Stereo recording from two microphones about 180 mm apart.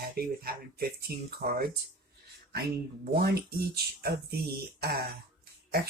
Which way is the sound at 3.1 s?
60° right (ahead or behind).